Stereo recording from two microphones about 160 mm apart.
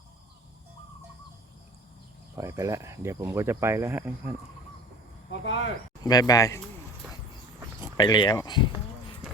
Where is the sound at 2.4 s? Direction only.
20° right (ahead or behind).